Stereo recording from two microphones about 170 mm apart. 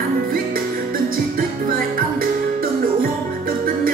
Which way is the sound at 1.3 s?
55° right (ahead or behind).